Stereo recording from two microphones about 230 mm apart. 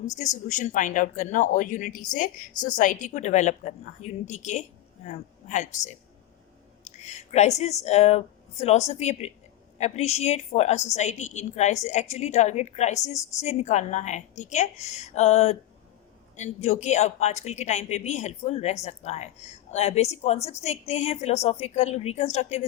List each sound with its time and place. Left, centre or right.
0.4 s a woman's voice: left